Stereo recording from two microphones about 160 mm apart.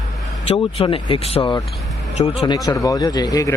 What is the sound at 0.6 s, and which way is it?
Speech, 35° left (ahead or behind).